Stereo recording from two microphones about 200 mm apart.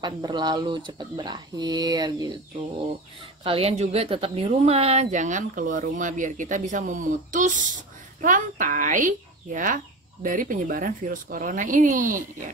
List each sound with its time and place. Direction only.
0.0 s speech: 20° right (ahead or behind)
3.4 s a woman's voice: 30° right (ahead or behind)